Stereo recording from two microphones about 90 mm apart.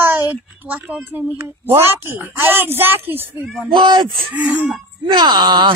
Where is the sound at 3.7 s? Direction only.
60° right (ahead or behind).